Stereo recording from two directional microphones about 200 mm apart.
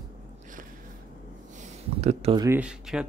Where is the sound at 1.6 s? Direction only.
30° right (ahead or behind).